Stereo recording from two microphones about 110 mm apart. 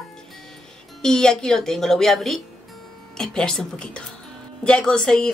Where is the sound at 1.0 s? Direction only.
5° left (ahead or behind).